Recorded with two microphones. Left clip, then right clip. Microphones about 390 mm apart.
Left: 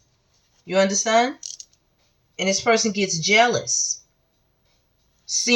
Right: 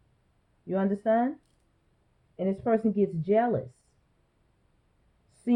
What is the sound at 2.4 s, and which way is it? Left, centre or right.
Speech, centre.